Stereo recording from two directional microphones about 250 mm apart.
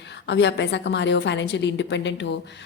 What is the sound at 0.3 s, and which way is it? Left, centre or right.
A woman's voice, left.